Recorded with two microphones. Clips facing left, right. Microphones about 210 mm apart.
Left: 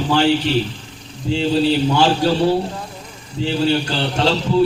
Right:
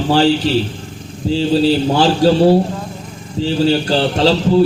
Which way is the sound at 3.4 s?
35° right (ahead or behind).